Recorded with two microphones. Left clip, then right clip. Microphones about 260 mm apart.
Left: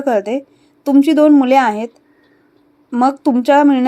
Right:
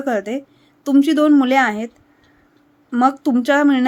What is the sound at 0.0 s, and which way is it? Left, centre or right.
A woman's voice, centre.